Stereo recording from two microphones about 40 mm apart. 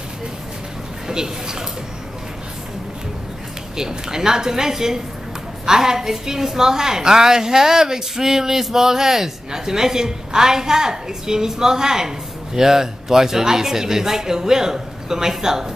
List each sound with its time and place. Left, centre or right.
1.0 s speech: centre
3.7 s a woman's voice: centre